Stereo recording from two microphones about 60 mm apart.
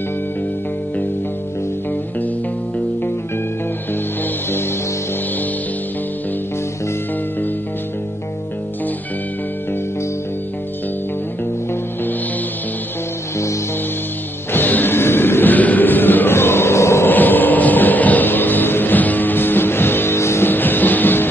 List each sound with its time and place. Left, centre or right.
14.5 s music: left
17.1 s music: left
20.4 s music: left